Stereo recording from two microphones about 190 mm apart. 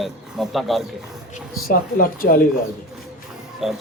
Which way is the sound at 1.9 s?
50° left (ahead or behind).